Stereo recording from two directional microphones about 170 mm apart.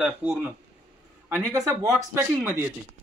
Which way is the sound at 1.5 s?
20° right (ahead or behind).